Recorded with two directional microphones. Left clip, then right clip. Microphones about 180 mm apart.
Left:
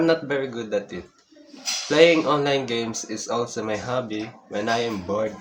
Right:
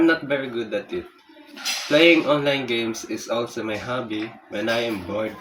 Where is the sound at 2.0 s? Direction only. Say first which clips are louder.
Left 1 dB; 25° left (ahead or behind).